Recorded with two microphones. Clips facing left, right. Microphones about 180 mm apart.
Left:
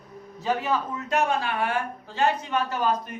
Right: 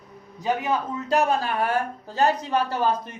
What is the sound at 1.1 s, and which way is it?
A man's voice, 35° right (ahead or behind).